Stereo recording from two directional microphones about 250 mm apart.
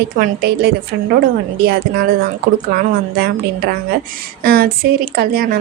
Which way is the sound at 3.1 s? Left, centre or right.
Right.